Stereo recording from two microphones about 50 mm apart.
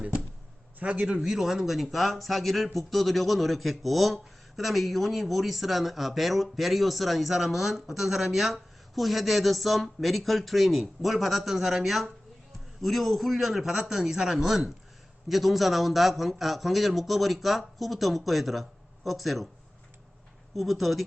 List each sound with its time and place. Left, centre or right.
0.8 s a man's voice: right
1.0 s speech: centre
20.6 s speech: centre